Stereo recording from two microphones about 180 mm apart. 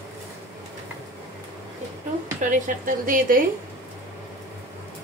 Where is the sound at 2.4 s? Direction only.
45° right (ahead or behind).